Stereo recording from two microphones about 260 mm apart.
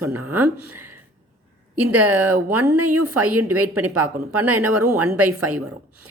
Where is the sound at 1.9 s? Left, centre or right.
Centre.